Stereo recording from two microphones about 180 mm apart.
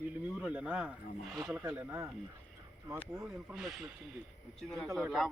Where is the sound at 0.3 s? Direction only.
5° right (ahead or behind).